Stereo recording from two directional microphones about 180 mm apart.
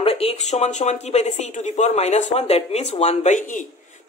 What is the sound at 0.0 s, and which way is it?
Speech, 35° left (ahead or behind).